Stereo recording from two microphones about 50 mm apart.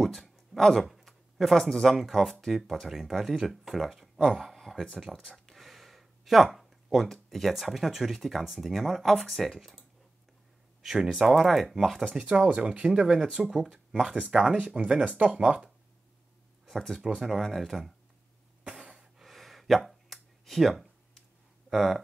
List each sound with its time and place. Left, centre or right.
0.0 s a sound: centre
2.4 s speech: centre
4.9 s speech: centre
5.3 s speech: centre
10.8 s speech: centre
12.1 s speech: right
13.4 s speech: centre
16.6 s speech: centre
18.6 s a sound: centre
21.6 s speech: centre